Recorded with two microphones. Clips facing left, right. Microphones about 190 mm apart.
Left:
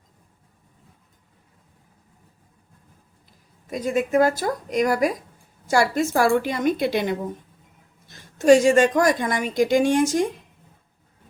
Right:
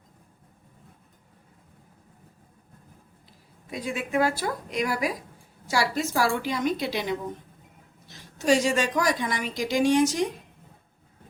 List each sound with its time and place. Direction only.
3.7 s a woman's voice: 45° left (ahead or behind)